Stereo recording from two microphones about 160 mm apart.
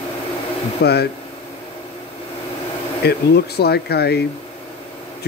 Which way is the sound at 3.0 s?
90° left.